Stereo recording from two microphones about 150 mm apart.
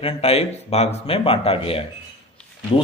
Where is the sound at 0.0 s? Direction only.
40° left (ahead or behind).